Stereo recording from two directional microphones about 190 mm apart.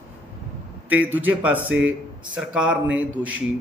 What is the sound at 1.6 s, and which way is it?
Speech, 85° right.